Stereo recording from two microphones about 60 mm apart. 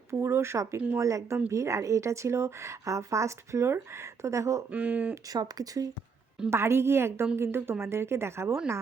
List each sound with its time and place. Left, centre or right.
0.1 s speech: right
4.7 s speech: right
5.3 s speech: right
6.5 s speech: right